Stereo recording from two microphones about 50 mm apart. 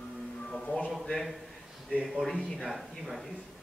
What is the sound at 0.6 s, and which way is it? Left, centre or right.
Speech, left.